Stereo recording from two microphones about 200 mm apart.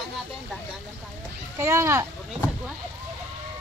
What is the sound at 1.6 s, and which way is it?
Speech, 15° right (ahead or behind).